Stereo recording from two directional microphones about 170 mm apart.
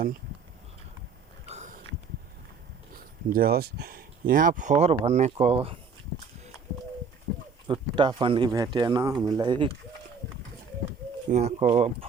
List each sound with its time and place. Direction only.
1.5 s a sound: 40° right (ahead or behind)
2.9 s speech: 60° right (ahead or behind); by 5.5 s 40° right (ahead or behind)
7.3 s horse: 15° left (ahead or behind)
7.7 s speech: 30° right (ahead or behind)
11.3 s speech: 40° right (ahead or behind)